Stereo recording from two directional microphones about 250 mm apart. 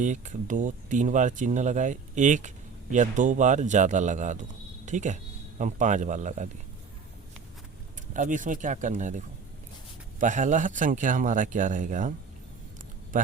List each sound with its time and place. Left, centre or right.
0.0 s speech: right
8.1 s a man's voice: right
13.1 s a man's voice: right